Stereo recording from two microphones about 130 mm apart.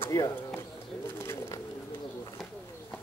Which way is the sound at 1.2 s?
20° left (ahead or behind).